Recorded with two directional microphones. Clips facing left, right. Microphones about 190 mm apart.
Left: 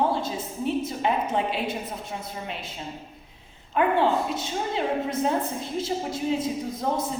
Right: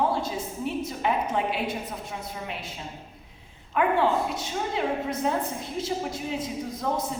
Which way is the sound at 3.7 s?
30° left (ahead or behind).